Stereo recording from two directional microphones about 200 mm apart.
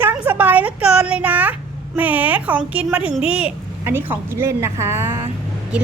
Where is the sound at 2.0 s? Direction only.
10° right (ahead or behind).